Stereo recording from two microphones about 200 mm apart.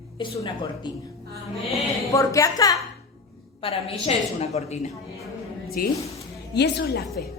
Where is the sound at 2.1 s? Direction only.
15° left (ahead or behind).